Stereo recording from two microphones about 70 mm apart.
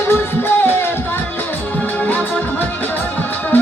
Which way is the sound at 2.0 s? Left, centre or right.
Left.